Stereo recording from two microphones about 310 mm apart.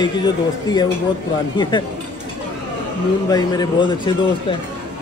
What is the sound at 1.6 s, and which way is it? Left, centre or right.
Speech, centre.